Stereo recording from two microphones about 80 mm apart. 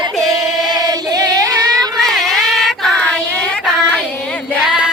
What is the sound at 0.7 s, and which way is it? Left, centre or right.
Singing, right.